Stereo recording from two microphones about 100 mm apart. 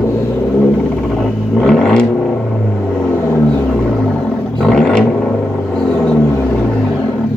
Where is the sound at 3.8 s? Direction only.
10° left (ahead or behind).